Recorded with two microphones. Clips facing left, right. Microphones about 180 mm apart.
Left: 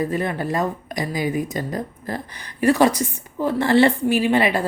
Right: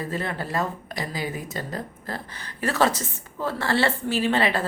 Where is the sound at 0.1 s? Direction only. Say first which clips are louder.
Left 5 dB; 15° left (ahead or behind).